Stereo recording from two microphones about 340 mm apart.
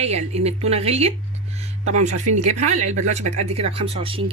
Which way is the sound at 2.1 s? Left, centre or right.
Right.